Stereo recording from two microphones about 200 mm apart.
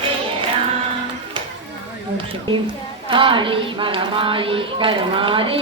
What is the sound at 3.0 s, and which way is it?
A woman's voice, 25° right (ahead or behind).